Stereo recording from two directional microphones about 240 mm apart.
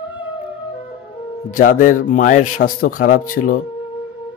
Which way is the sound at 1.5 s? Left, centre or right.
Left.